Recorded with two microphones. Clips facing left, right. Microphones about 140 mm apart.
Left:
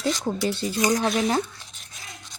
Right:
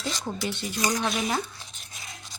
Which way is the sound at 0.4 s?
35° left (ahead or behind).